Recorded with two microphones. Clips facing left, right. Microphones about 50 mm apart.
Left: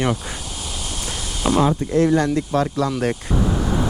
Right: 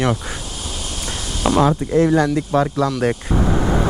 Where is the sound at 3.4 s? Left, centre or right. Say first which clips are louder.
Right 4 dB; right.